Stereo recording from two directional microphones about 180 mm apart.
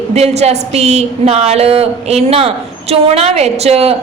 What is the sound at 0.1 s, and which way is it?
A woman's voice, 35° right (ahead or behind).